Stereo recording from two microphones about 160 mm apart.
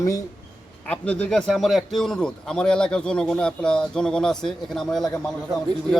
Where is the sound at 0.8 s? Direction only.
5° left (ahead or behind).